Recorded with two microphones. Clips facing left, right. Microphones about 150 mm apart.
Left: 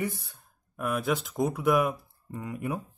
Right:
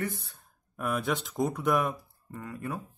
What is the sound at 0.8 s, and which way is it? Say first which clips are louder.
Speech: left 2 dB; centre (ahead or behind).